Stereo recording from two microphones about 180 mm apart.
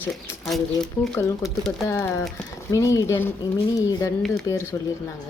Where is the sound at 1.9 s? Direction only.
15° left (ahead or behind).